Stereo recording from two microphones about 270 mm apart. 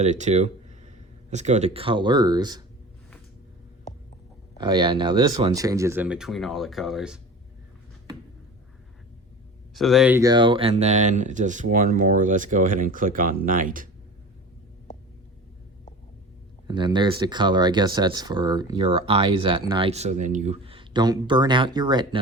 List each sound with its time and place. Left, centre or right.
0.0 s speech: right
4.5 s speech: centre
9.7 s speech: centre; by 13.8 s right
16.6 s speech: centre